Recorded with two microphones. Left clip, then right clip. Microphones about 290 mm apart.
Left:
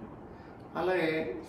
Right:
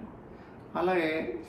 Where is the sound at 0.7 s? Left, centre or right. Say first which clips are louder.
Right 2 dB; right.